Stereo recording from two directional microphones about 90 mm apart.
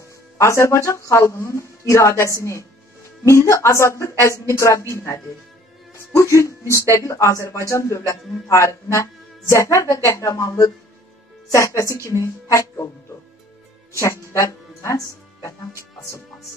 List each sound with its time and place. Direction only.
0.4 s speech: 35° left (ahead or behind)
13.9 s speech: 35° left (ahead or behind)